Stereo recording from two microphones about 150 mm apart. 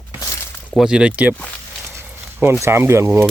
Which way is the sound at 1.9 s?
15° right (ahead or behind).